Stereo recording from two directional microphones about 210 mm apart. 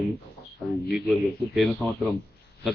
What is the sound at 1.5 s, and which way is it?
Speech, centre (ahead or behind).